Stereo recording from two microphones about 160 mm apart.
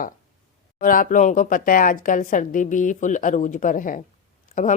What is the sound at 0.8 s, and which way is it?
A woman's voice, 60° left (ahead or behind).